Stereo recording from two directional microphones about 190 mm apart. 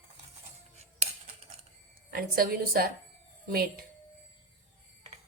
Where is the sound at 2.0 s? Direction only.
50° right (ahead or behind).